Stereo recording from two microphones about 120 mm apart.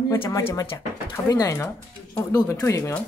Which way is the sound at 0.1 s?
25° left (ahead or behind).